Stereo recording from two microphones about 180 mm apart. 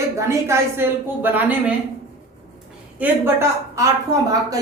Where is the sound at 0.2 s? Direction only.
15° right (ahead or behind).